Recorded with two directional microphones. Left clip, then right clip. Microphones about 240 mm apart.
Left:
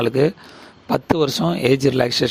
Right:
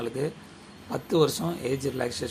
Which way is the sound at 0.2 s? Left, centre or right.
Left.